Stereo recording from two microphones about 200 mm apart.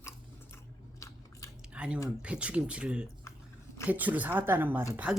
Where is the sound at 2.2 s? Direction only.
5° right (ahead or behind).